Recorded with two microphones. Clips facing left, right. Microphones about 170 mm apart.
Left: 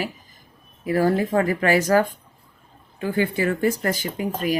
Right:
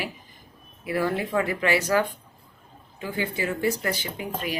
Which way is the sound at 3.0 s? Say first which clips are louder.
Left 7 dB; 55° left (ahead or behind).